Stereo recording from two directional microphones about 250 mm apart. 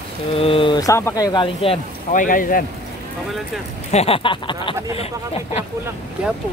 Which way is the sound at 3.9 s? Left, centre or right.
Left.